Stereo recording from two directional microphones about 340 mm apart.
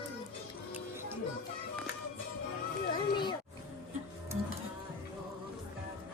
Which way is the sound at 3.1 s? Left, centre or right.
Centre.